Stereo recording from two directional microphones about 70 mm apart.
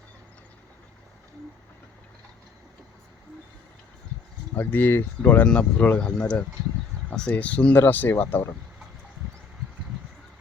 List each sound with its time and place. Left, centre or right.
4.5 s speech: left
5.5 s speech: centre; by 8.4 s left